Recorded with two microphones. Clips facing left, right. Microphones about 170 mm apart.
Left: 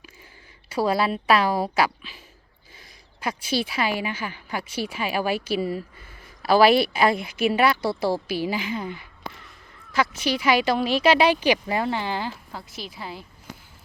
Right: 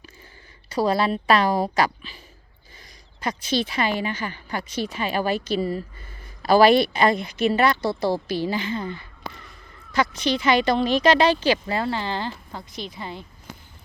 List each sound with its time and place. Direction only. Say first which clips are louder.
0.7 s speech: right 1 dB; 10° left (ahead or behind)